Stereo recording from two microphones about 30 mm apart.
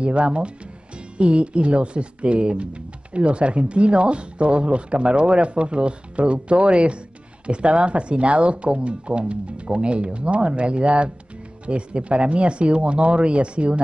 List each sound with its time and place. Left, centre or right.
0.0 s speech: right